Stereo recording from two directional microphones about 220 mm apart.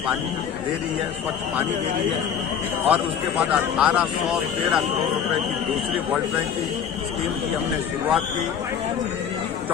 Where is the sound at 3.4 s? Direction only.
5° right (ahead or behind).